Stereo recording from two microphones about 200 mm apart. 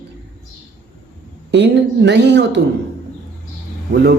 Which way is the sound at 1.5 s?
60° right (ahead or behind).